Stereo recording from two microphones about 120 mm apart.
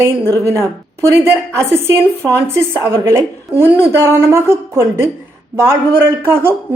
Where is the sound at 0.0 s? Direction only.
25° right (ahead or behind).